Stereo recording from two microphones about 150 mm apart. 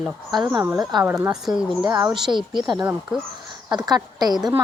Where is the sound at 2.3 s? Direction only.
30° right (ahead or behind).